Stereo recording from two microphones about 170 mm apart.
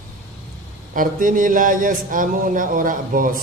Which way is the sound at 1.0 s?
50° right (ahead or behind).